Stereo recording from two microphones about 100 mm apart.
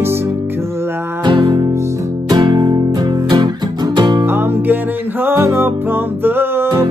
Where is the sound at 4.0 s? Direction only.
45° right (ahead or behind).